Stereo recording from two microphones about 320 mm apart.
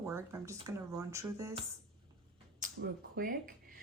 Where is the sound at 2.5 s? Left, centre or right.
Right.